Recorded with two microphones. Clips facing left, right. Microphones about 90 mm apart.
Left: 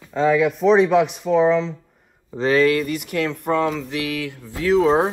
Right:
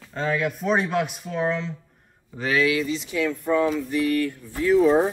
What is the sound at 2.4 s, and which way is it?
Speech, 40° left (ahead or behind).